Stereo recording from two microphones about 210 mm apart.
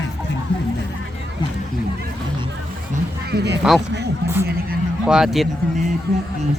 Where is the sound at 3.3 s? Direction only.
50° right (ahead or behind).